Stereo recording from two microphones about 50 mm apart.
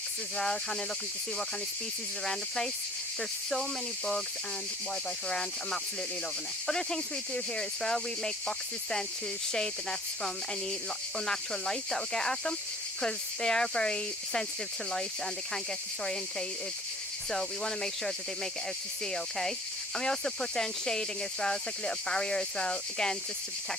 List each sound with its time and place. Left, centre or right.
2.2 s speech: centre
5.3 s speech: centre
17.3 s speech: centre
19.1 s speech: centre